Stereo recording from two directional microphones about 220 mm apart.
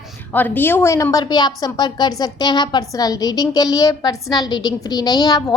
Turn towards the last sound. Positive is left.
turn(degrees=20)  # may be behind; listen again after turning